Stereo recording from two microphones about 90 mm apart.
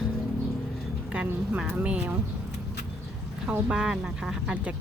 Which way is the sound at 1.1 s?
15° right (ahead or behind).